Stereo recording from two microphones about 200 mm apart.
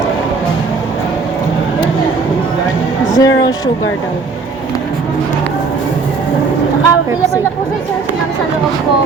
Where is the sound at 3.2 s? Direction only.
20° left (ahead or behind).